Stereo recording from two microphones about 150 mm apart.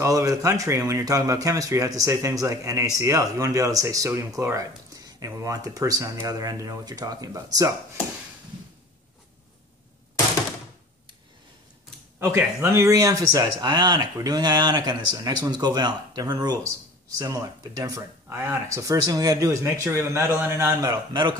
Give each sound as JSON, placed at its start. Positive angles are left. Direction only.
{"t": 0.0, "sound": "speech", "side_deg": -20}
{"t": 12.2, "sound": "speech", "side_deg": -15}